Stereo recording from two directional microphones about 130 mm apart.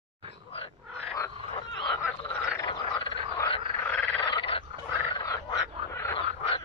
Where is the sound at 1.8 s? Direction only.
35° left (ahead or behind).